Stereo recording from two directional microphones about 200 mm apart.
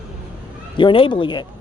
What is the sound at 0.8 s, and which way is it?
Speech, 25° left (ahead or behind).